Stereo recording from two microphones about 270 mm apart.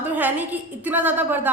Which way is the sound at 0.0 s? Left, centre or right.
Centre.